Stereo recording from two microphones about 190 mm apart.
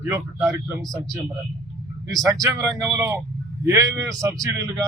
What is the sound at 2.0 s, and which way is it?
A man's voice, 20° right (ahead or behind).